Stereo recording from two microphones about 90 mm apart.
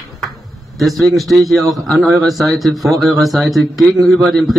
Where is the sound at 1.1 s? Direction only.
Centre (ahead or behind).